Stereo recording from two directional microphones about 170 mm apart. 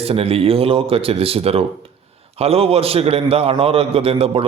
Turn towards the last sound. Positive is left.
turn(degrees=-35)  # may be behind; listen again after turning